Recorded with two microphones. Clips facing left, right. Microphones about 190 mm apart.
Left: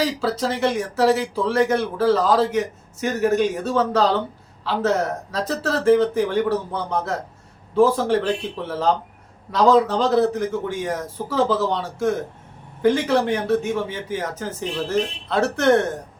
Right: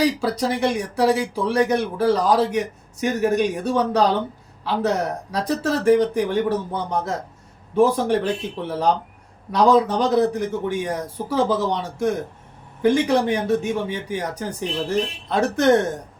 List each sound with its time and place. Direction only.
0.0 s speech: 15° right (ahead or behind)